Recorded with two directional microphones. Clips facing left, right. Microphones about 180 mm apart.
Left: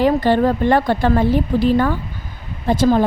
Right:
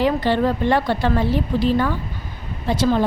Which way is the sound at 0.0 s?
45° left (ahead or behind).